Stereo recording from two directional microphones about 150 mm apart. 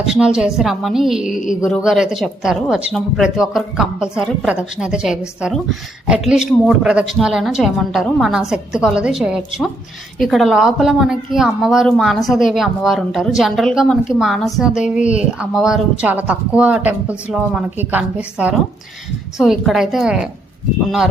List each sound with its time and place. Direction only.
0.0 s speech: 5° right (ahead or behind)